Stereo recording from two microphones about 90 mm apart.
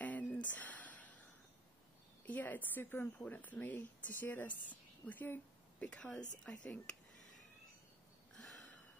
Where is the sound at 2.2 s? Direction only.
20° left (ahead or behind).